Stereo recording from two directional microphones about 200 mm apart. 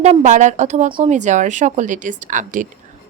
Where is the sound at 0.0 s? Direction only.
35° right (ahead or behind).